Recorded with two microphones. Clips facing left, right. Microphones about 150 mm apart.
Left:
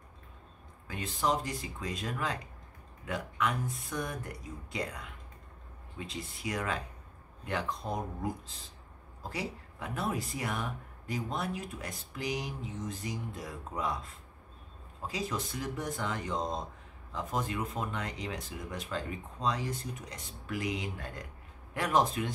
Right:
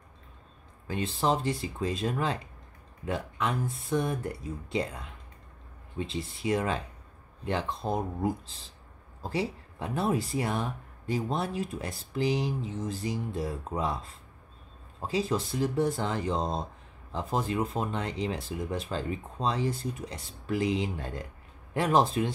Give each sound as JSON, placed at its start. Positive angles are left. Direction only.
{"t": 0.8, "sound": "speech", "side_deg": -30}